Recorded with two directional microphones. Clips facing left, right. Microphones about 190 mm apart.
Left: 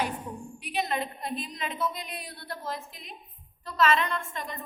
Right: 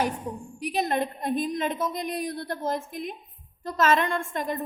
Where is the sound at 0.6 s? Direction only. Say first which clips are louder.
Right 5 dB; 45° right (ahead or behind).